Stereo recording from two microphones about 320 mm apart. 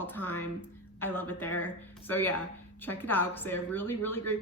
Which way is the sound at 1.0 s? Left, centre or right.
Centre.